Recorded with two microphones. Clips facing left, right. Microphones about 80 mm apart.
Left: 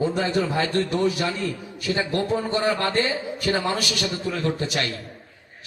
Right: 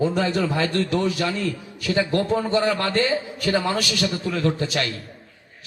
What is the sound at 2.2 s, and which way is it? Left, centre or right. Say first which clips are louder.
A man's voice: right 2 dB; left.